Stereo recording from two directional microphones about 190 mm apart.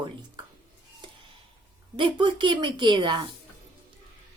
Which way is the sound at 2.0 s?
25° right (ahead or behind).